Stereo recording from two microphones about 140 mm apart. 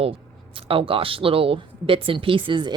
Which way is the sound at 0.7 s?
40° right (ahead or behind).